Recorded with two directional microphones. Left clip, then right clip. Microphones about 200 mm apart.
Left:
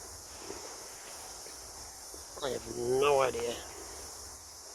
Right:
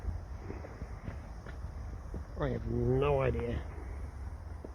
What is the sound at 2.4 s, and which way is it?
Speech, 20° left (ahead or behind).